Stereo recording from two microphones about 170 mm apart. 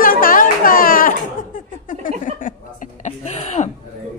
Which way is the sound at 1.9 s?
50° left (ahead or behind).